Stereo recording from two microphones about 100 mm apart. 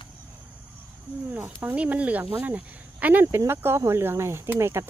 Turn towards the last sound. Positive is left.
turn(degrees=-25)  # may be behind; listen again after turning